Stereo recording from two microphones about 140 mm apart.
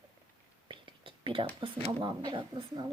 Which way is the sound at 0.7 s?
35° right (ahead or behind).